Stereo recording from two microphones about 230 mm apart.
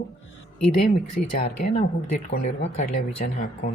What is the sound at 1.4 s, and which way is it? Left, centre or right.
Speech, left.